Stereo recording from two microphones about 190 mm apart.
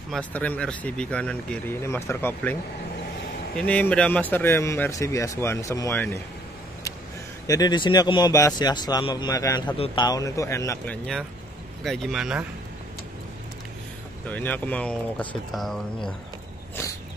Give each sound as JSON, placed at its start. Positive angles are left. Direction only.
{"t": 0.1, "sound": "speech", "side_deg": 5}
{"t": 3.5, "sound": "speech", "side_deg": 5}
{"t": 7.4, "sound": "speech", "side_deg": 20}
{"t": 11.8, "sound": "speech", "side_deg": 0}
{"t": 14.2, "sound": "speech", "side_deg": 10}